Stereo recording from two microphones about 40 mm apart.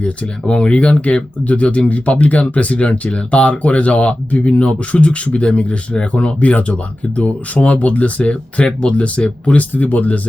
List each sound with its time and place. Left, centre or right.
0.4 s speech: left
9.7 s speech: left